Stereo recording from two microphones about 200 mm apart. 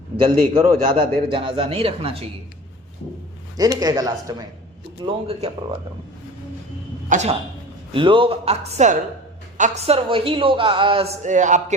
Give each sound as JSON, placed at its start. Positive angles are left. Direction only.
{"t": 0.2, "sound": "a man's voice", "side_deg": -25}
{"t": 3.6, "sound": "a man's voice", "side_deg": -20}
{"t": 7.1, "sound": "a woman's voice", "side_deg": -35}
{"t": 7.9, "sound": "a man's voice", "side_deg": -25}